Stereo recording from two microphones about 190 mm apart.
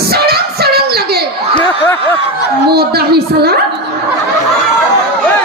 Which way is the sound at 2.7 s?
55° right (ahead or behind).